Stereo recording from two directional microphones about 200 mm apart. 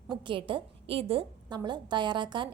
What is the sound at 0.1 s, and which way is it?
A woman's voice, 25° right (ahead or behind).